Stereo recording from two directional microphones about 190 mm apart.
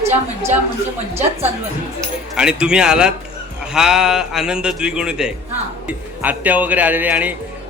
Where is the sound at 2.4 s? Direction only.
5° right (ahead or behind).